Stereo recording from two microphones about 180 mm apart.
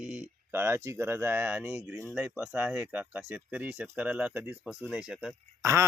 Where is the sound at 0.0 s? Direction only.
5° right (ahead or behind).